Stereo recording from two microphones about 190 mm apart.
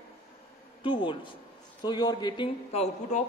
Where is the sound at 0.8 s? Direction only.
25° left (ahead or behind).